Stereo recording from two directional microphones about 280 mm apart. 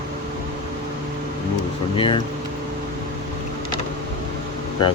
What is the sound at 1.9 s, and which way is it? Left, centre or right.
Speech, centre.